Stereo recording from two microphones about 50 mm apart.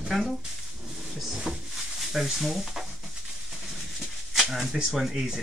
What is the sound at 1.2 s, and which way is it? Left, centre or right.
Cupboard open or close, centre.